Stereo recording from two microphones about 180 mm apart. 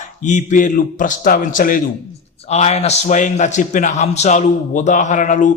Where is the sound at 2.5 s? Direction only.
35° left (ahead or behind).